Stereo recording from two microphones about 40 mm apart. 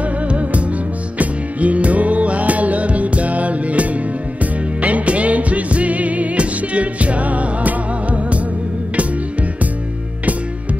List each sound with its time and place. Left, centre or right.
0.0 s music: right